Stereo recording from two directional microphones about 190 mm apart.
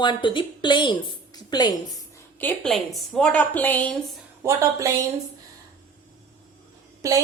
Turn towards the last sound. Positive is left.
turn(degrees=-15)  # may be behind; listen again after turning